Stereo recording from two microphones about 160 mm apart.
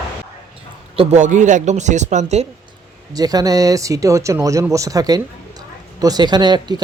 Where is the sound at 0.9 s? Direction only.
50° right (ahead or behind).